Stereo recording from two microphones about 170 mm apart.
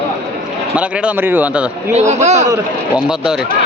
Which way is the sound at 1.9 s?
45° right (ahead or behind).